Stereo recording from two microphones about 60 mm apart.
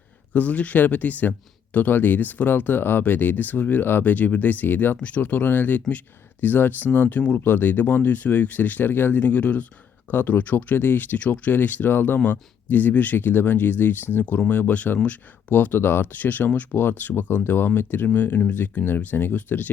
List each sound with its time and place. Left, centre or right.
0.3 s speech: left
4.9 s speech: left